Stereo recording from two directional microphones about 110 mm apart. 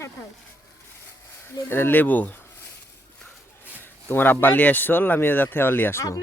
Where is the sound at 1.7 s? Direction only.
20° left (ahead or behind).